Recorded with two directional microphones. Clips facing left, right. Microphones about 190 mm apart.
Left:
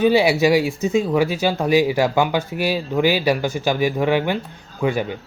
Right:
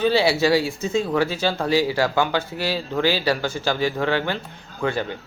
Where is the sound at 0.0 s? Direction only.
15° left (ahead or behind).